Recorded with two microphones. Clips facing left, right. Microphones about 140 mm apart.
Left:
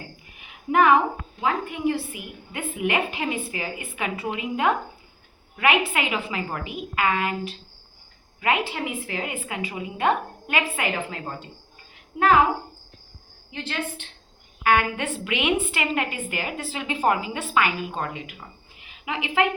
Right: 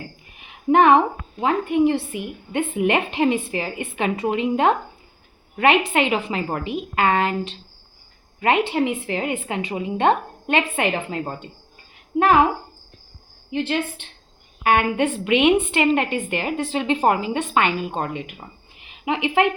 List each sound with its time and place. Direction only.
0.7 s a woman's voice: 25° right (ahead or behind)
6.9 s a woman's voice: 30° right (ahead or behind)
13.5 s a woman's voice: 20° right (ahead or behind)
17.2 s a woman's voice: 15° left (ahead or behind)
17.5 s a woman's voice: 25° right (ahead or behind)